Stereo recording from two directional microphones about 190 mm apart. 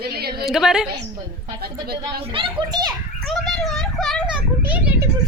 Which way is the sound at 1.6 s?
55° right (ahead or behind).